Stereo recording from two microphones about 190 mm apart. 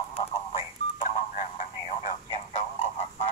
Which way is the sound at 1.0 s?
45° left (ahead or behind).